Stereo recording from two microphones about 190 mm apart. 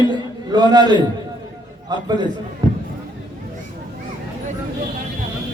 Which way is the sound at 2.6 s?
20° right (ahead or behind).